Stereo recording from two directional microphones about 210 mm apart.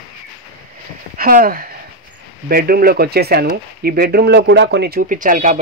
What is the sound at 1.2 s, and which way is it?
Speech, 45° right (ahead or behind).